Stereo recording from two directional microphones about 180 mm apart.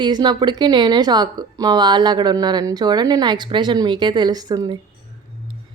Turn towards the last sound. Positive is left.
turn(degrees=-20)  # may be behind; listen again after turning